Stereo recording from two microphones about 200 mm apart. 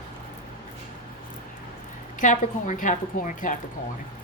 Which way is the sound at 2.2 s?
40° left (ahead or behind).